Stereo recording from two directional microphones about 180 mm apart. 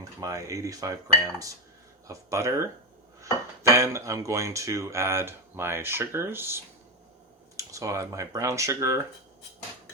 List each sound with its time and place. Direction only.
0.0 s speech: 15° right (ahead or behind)